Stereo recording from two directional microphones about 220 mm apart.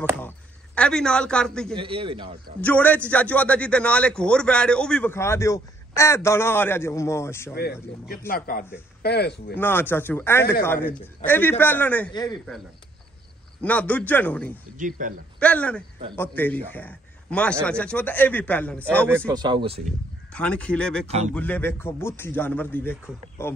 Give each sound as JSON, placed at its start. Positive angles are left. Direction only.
{"t": 0.7, "sound": "a man's voice", "side_deg": 5}
{"t": 1.8, "sound": "speech", "side_deg": -25}
{"t": 2.6, "sound": "a man's voice", "side_deg": 5}
{"t": 8.3, "sound": "speech", "side_deg": 40}
{"t": 9.6, "sound": "a man's voice", "side_deg": 10}
{"t": 12.1, "sound": "speech", "side_deg": 20}
{"t": 13.6, "sound": "a man's voice", "side_deg": 5}
{"t": 14.8, "sound": "speech", "side_deg": -40}
{"t": 15.3, "sound": "a man's voice", "side_deg": 5}
{"t": 19.0, "sound": "speech", "side_deg": -15}
{"t": 20.3, "sound": "a man's voice", "side_deg": 5}